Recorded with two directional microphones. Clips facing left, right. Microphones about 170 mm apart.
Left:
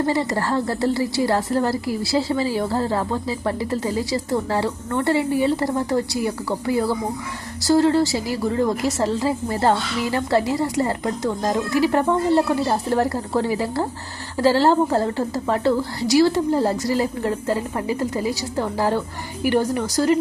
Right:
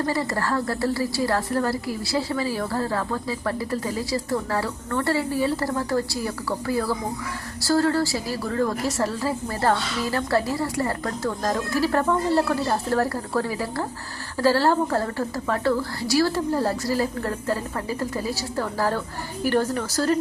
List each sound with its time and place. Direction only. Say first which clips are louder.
0.0 s a woman's voice: left 4 dB; 20° left (ahead or behind)